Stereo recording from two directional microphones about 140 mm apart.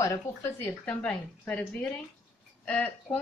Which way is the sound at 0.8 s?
10° left (ahead or behind).